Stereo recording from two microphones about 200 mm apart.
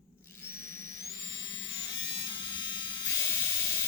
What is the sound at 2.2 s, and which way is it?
Electric shaver, 20° left (ahead or behind).